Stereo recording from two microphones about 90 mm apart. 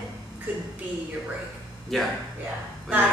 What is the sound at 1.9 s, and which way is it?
Speech, centre (ahead or behind).